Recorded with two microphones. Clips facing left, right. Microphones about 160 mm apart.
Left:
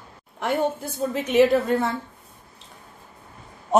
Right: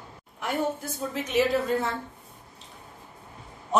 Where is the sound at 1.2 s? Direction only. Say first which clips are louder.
Left 6 dB; 60° left (ahead or behind).